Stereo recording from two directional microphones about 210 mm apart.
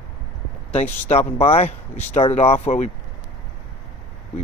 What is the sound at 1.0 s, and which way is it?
Speech, 30° left (ahead or behind).